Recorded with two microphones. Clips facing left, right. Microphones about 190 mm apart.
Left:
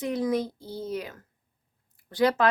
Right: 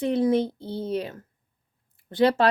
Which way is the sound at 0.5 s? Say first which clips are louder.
Right 4 dB; 60° right (ahead or behind).